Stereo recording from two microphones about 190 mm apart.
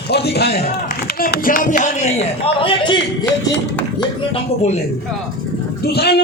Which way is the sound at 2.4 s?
30° left (ahead or behind).